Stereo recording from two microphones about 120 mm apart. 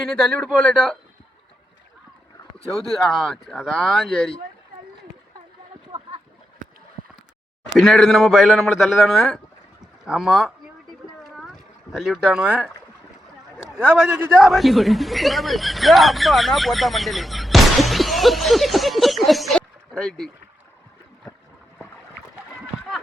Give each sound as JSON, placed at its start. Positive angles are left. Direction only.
{"t": 0.3, "sound": "speech", "side_deg": 10}
{"t": 2.7, "sound": "speech", "side_deg": 0}
{"t": 7.8, "sound": "speech", "side_deg": 0}
{"t": 11.2, "sound": "boat", "side_deg": 0}
{"t": 13.7, "sound": "a man's voice", "side_deg": -5}